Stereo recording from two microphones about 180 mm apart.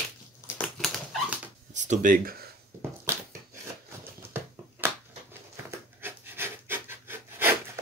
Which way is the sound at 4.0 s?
10° right (ahead or behind).